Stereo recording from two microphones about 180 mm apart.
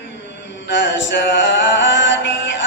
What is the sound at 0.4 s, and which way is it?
Music, 85° left.